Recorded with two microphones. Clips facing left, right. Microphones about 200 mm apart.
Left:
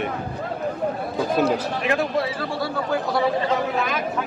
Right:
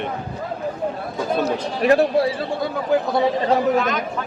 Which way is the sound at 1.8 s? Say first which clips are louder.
Right 6 dB; 35° right (ahead or behind).